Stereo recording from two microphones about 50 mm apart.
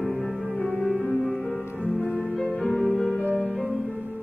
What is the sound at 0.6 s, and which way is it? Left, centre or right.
Music, centre.